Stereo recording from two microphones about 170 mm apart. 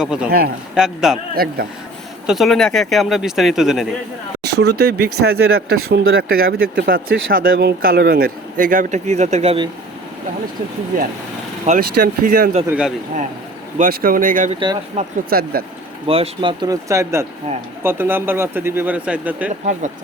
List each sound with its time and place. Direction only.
0.0 s speech: 5° right (ahead or behind)
0.3 s speech: 65° right (ahead or behind)
0.8 s speech: 5° right (ahead or behind)
2.2 s speech: centre (ahead or behind)
4.5 s speech: 70° right (ahead or behind); by 9.6 s 35° right (ahead or behind)
10.9 s speech: 55° right (ahead or behind)
12.6 s speech: 5° right (ahead or behind)
13.7 s speech: 55° right (ahead or behind)
15.0 s speech: 40° right (ahead or behind)
15.3 s speech: 60° right (ahead or behind)
16.0 s speech: 35° right (ahead or behind); by 19.5 s 10° right (ahead or behind)